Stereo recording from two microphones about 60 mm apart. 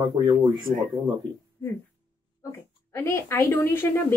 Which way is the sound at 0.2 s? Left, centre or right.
Right.